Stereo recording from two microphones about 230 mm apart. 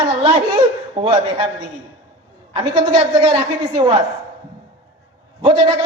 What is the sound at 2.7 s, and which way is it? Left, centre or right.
A man's voice, right.